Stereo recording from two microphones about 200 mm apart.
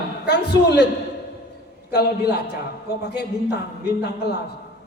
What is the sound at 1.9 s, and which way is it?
A man's voice, 55° left (ahead or behind).